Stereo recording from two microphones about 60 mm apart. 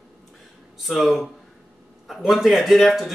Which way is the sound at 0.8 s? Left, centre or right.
Centre.